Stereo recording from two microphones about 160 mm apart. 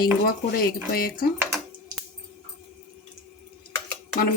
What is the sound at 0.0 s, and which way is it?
Speech, 65° left (ahead or behind).